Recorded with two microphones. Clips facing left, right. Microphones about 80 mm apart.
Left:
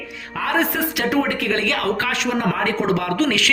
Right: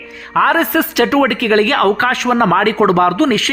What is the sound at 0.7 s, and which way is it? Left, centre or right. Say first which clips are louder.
Speech: right 7 dB; right.